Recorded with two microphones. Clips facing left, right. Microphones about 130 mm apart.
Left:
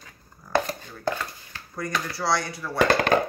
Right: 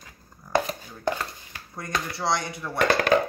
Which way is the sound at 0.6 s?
10° right (ahead or behind).